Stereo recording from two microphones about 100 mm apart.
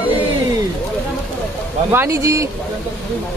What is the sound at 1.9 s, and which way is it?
Speech, 25° right (ahead or behind).